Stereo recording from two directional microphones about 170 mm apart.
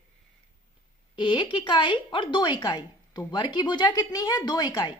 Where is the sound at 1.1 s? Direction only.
30° left (ahead or behind).